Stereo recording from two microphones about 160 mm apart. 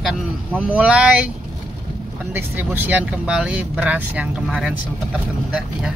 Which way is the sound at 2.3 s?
10° right (ahead or behind).